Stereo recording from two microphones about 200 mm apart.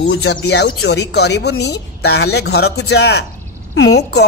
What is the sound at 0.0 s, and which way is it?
Speech, 55° left (ahead or behind).